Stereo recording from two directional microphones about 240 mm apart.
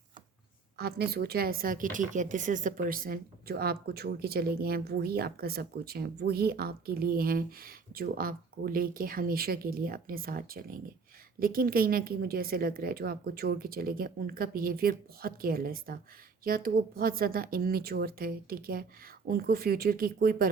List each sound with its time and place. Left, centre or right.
0.8 s a woman's voice: right